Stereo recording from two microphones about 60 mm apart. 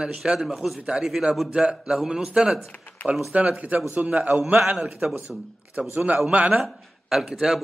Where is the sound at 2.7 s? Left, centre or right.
Left.